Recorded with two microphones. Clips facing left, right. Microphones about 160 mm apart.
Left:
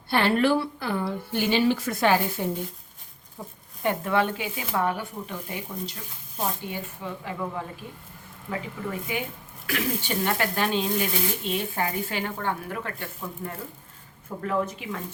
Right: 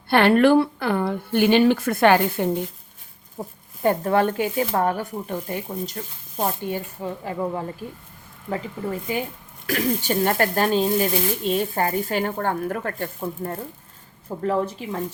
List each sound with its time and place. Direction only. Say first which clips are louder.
0.1 s speech: right 6 dB; 60° right (ahead or behind)
3.4 s speech: right 7 dB; 40° right (ahead or behind)
9.1 s speech: right 4 dB; 35° right (ahead or behind)
14.4 s speech: right 4 dB; 30° right (ahead or behind)